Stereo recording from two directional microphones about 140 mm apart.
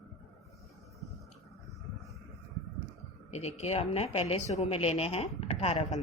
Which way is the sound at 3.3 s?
50° left (ahead or behind).